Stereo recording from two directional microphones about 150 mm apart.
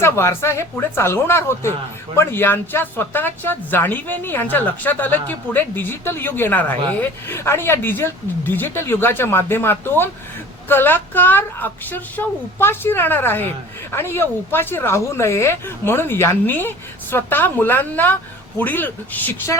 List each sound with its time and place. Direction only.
0.0 s speech: 15° left (ahead or behind)